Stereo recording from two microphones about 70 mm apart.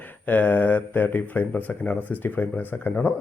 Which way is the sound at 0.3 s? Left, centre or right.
Left.